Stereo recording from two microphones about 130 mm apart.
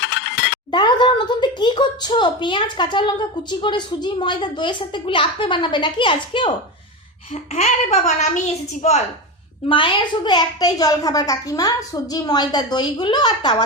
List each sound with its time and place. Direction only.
0.7 s a woman's voice: 35° left (ahead or behind)
7.5 s a woman's voice: 60° left (ahead or behind)
9.6 s a woman's voice: 40° left (ahead or behind)